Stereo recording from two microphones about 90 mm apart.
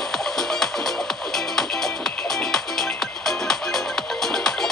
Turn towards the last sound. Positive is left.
turn(degrees=5)  # may be behind; listen again after turning